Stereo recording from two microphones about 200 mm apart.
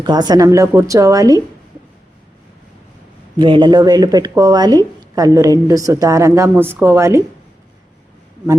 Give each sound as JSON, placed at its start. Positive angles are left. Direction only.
{"t": 0.0, "sound": "speech", "side_deg": -20}
{"t": 3.3, "sound": "speech", "side_deg": -25}